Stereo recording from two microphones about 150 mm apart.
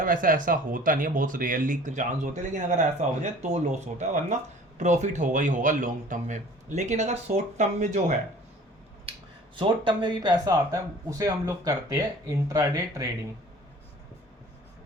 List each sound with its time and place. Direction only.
0.0 s a man's voice: 65° right (ahead or behind)
9.6 s speech: 30° right (ahead or behind)